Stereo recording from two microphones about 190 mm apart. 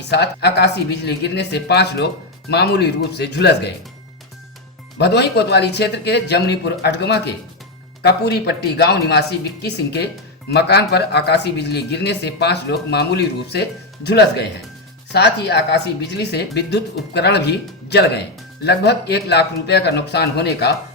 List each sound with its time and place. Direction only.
0.1 s speech: 60° left (ahead or behind)
4.9 s speech: 60° left (ahead or behind)